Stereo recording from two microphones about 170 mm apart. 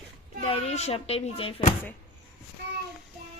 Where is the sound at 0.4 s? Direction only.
35° left (ahead or behind).